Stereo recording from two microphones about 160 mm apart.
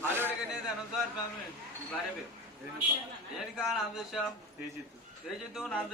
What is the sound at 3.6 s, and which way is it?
Speech, centre (ahead or behind).